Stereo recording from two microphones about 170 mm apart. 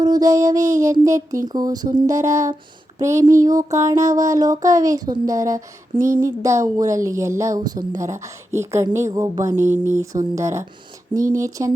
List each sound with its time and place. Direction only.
0.0 s speech: 20° right (ahead or behind)